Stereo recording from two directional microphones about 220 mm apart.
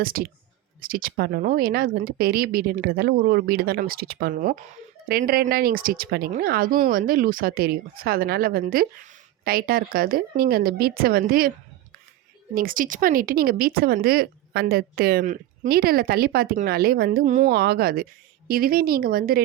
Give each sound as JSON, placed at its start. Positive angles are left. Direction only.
{"t": 0.0, "sound": "speech", "side_deg": -40}
{"t": 12.5, "sound": "speech", "side_deg": -40}